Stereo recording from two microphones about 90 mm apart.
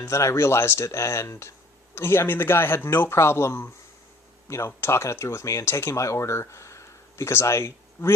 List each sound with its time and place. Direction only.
0.0 s speech: 30° left (ahead or behind)